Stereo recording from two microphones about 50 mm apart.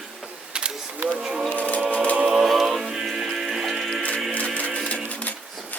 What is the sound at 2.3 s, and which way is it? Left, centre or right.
Music, centre.